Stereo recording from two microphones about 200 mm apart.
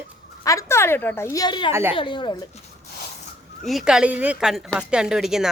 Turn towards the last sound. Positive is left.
turn(degrees=-5)  # may be behind; listen again after turning